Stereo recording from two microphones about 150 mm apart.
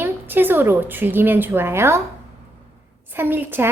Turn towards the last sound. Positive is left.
turn(degrees=-15)  # may be behind; listen again after turning